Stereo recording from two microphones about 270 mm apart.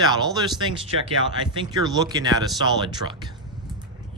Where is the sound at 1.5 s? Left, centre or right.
Centre.